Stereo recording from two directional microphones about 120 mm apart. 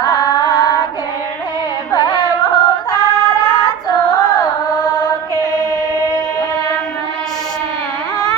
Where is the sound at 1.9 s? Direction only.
35° left (ahead or behind).